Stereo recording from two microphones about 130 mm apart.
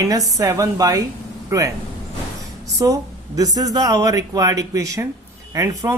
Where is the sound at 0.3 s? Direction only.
25° right (ahead or behind).